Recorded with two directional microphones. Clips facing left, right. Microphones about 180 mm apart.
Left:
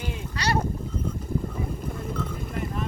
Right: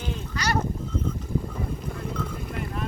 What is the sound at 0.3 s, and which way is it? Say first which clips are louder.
Speech: left 1 dB; 30° left (ahead or behind).